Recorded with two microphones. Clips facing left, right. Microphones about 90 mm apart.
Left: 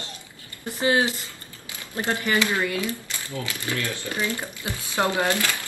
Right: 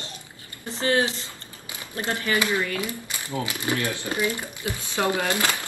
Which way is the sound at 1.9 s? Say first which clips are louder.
Left 1 dB; 20° left (ahead or behind).